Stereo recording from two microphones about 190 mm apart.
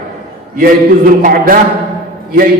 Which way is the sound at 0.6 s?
45° right (ahead or behind).